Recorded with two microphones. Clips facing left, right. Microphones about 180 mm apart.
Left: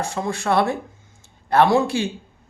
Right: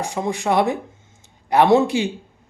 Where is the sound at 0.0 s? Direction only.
15° right (ahead or behind).